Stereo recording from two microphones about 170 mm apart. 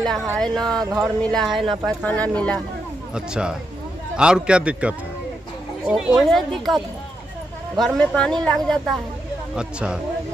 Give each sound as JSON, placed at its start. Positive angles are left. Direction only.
{"t": 0.0, "sound": "speech", "side_deg": 0}
{"t": 3.2, "sound": "a man's voice", "side_deg": -5}